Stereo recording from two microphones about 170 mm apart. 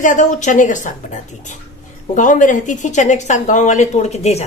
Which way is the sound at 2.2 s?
50° left (ahead or behind).